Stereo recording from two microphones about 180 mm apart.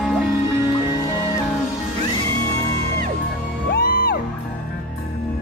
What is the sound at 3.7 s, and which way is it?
Music, 55° left (ahead or behind).